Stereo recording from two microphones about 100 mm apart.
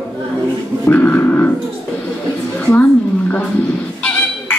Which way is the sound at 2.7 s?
15° left (ahead or behind).